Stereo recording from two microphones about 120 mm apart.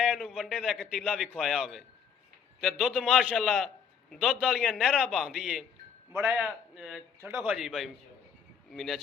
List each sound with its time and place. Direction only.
0.0 s a man's voice: 5° right (ahead or behind)
6.1 s a man's voice: 20° right (ahead or behind)
6.4 s a man's voice: centre (ahead or behind)
7.2 s a man's voice: 20° right (ahead or behind)
7.5 s a man's voice: 5° right (ahead or behind)